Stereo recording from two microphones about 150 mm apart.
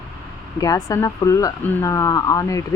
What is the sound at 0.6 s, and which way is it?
Speech, 25° left (ahead or behind).